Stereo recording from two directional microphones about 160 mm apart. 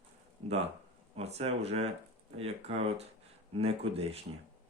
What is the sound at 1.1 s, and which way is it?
Speech, 40° right (ahead or behind).